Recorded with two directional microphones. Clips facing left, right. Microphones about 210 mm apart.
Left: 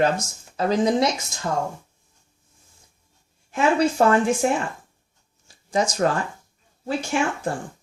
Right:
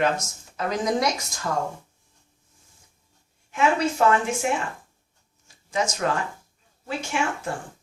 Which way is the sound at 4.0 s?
40° left (ahead or behind).